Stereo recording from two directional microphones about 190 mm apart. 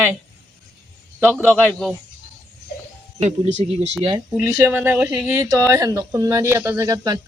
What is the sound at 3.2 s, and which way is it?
Speech, 35° right (ahead or behind).